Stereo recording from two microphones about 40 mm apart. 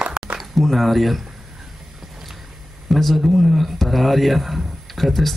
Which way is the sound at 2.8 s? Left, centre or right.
Centre.